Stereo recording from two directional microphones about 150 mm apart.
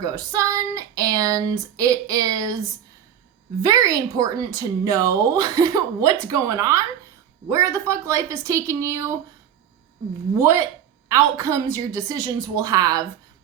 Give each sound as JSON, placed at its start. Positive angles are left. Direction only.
{"t": 0.0, "sound": "speech", "side_deg": -25}
{"t": 3.6, "sound": "speech", "side_deg": -25}
{"t": 10.3, "sound": "speech", "side_deg": -15}